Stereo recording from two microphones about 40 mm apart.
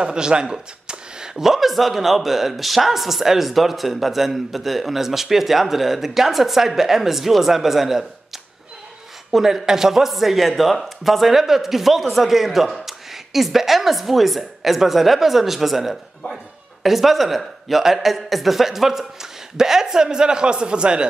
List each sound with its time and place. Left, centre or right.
0.0 s speech: right; by 8.1 s centre
9.3 s speech: centre